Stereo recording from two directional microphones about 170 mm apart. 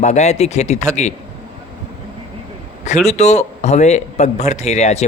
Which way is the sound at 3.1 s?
40° left (ahead or behind).